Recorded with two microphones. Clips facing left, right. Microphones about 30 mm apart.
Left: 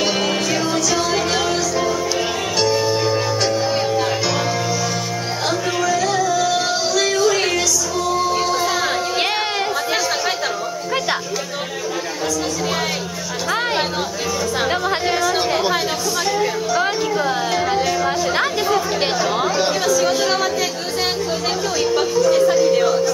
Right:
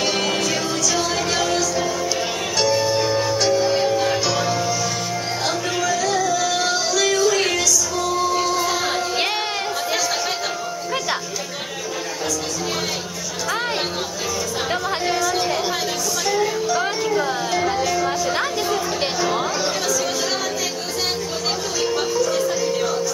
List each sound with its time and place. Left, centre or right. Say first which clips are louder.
0.0 s music: left 2 dB; centre
5.8 s music: left 2 dB; centre
14.7 s chatter: even; centre
16.3 s music: right 1 dB; centre
19.6 s chatter: left 5 dB; left
21.9 s music: left 6 dB; centre